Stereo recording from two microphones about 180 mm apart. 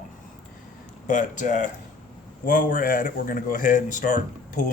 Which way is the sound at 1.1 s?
45° left (ahead or behind).